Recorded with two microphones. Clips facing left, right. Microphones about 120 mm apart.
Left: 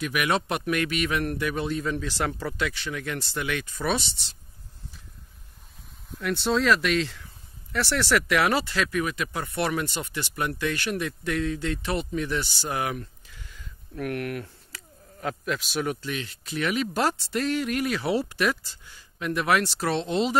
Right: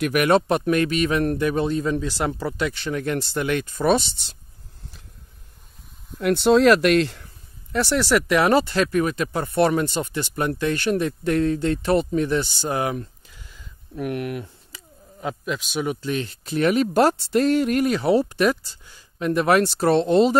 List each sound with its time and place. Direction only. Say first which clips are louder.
0.0 s speech: right 8 dB; 50° right (ahead or behind)
0.5 s speech: right 7 dB; 35° right (ahead or behind)
6.2 s speech: right 8 dB; 65° right (ahead or behind)
7.7 s speech: right 5 dB; 20° right (ahead or behind)
8.3 s speech: right 6 dB; 35° right (ahead or behind)
12.4 s a sound: right 5 dB; 25° right (ahead or behind)
15.7 s speech: right 4 dB; 15° right (ahead or behind)
16.1 s speech: right 7 dB; 35° right (ahead or behind)